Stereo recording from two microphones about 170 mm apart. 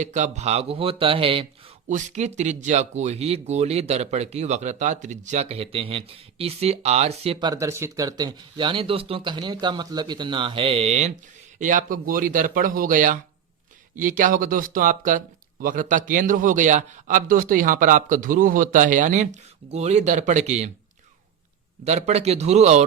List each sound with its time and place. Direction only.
0.0 s speech: 45° right (ahead or behind)
1.9 s speech: 45° right (ahead or behind)
7.3 s a man's voice: 25° right (ahead or behind); by 20.7 s 45° right (ahead or behind)
21.8 s speech: 40° right (ahead or behind)